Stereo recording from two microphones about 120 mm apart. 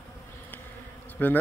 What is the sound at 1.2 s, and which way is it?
Speech, 15° left (ahead or behind).